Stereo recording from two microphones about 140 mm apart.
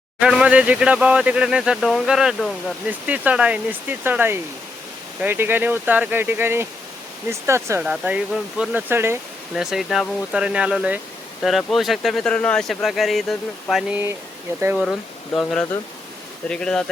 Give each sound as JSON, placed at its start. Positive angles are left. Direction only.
{"t": 0.2, "sound": "speech", "side_deg": -5}
{"t": 7.9, "sound": "speech", "side_deg": -10}
{"t": 9.6, "sound": "speech", "side_deg": -5}
{"t": 15.4, "sound": "speech", "side_deg": 5}